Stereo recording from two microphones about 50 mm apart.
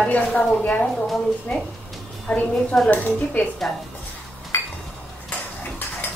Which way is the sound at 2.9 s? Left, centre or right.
Left.